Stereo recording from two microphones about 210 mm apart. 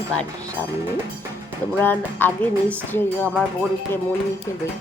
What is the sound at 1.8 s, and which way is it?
Speech, 10° left (ahead or behind).